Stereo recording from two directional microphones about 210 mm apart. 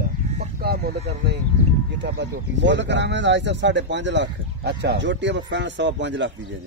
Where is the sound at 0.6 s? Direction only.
45° right (ahead or behind).